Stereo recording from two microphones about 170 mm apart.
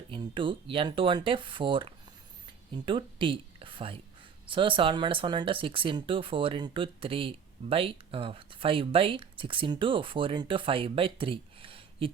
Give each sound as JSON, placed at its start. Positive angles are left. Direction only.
{"t": 0.1, "sound": "speech", "side_deg": -30}